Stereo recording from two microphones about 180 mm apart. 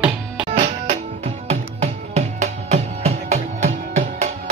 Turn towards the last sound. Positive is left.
turn(degrees=-40)  # may be behind; listen again after turning